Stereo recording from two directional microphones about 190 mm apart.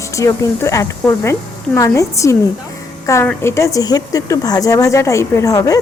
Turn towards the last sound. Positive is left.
turn(degrees=20)  # may be behind; listen again after turning